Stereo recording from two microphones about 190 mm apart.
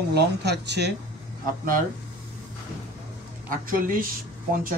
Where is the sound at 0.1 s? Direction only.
60° right (ahead or behind).